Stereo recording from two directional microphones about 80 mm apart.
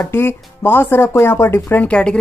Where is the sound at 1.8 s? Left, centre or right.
Centre.